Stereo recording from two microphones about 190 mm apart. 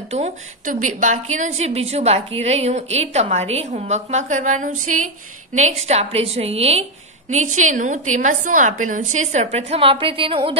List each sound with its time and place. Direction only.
0.1 s a woman's voice: 40° right (ahead or behind)